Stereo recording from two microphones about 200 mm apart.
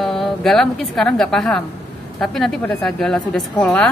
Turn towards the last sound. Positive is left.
turn(degrees=5)  # may be behind; listen again after turning